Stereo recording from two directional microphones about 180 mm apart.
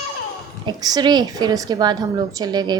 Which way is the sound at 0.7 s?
25° right (ahead or behind).